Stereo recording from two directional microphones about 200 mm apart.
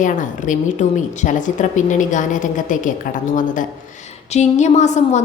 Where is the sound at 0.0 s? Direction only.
40° left (ahead or behind).